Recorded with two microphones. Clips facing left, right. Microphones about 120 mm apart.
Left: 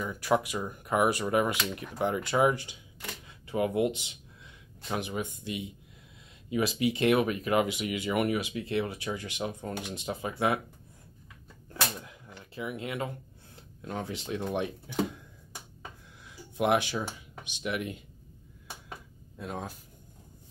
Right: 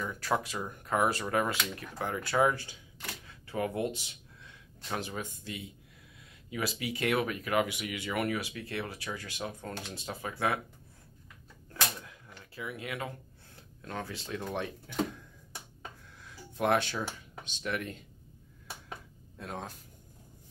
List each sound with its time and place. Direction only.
0.0 s speech: 10° left (ahead or behind)
11.7 s a sound: 20° left (ahead or behind)
13.8 s speech: 20° left (ahead or behind)
16.5 s speech: 15° left (ahead or behind)
19.3 s speech: 5° left (ahead or behind)